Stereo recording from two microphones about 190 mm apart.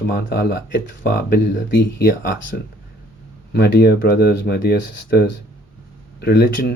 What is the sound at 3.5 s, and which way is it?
Speech, 55° left (ahead or behind).